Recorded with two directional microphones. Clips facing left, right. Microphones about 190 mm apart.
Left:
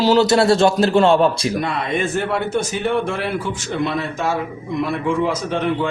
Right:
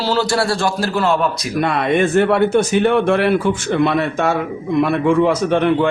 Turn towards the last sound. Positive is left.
turn(degrees=-65)  # may be behind; listen again after turning